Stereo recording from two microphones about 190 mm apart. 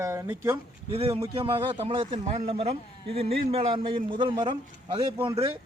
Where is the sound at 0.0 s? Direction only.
15° right (ahead or behind).